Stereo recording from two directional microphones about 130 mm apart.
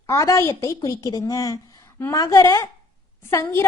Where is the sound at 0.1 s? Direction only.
25° left (ahead or behind).